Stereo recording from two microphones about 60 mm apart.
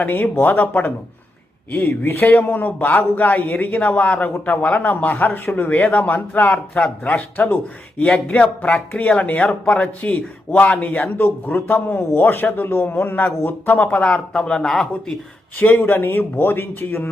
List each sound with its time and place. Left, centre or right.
0.1 s a man's voice: left; by 15.1 s centre
15.5 s speech: left